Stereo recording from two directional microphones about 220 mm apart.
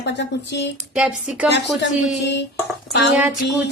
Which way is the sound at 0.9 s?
5° right (ahead or behind).